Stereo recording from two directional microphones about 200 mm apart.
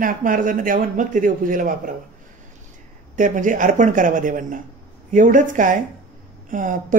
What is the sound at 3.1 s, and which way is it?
Speech, 40° right (ahead or behind).